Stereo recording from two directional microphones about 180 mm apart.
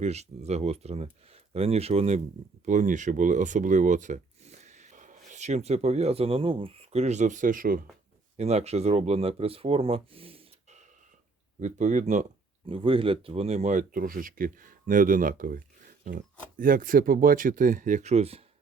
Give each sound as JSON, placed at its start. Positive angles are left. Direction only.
{"t": 0.0, "sound": "speech", "side_deg": -35}
{"t": 8.4, "sound": "speech", "side_deg": -35}
{"t": 12.6, "sound": "speech", "side_deg": -30}